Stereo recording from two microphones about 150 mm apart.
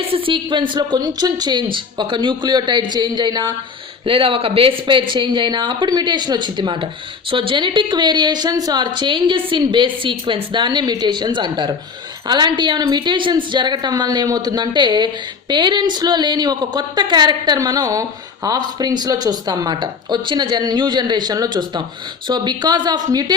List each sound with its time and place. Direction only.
0.0 s a woman's voice: 35° right (ahead or behind)